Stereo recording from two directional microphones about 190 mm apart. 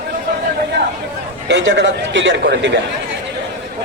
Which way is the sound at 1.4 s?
70° right (ahead or behind).